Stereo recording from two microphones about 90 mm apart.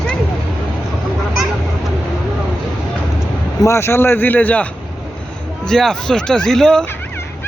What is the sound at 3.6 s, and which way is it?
Speech, 30° left (ahead or behind).